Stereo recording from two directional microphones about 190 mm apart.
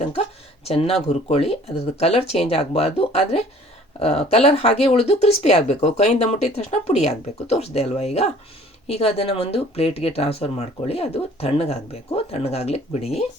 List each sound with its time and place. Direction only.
0.0 s speech: 30° left (ahead or behind)